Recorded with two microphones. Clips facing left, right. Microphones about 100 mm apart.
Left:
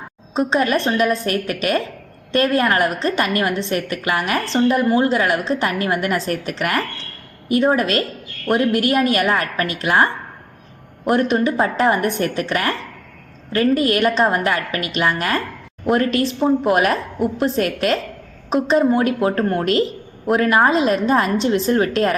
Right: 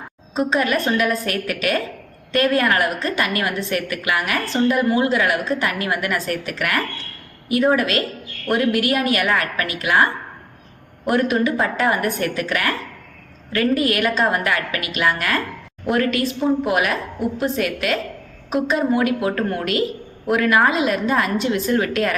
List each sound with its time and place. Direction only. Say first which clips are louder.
0.3 s a woman's voice: left 2 dB; 25° left (ahead or behind)
13.7 s a woman's voice: left 3 dB; 35° left (ahead or behind)